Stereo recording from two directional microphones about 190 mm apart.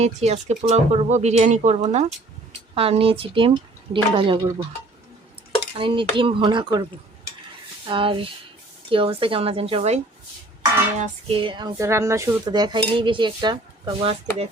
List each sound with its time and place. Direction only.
0.0 s speech: 35° right (ahead or behind)
5.7 s speech: 25° right (ahead or behind)
7.9 s speech: 25° right (ahead or behind)